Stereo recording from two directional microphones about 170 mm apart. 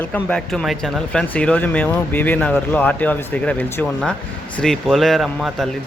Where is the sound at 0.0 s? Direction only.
10° left (ahead or behind).